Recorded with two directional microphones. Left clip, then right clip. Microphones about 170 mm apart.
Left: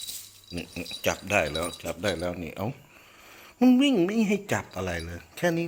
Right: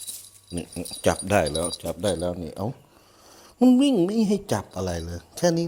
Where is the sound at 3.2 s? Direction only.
30° right (ahead or behind).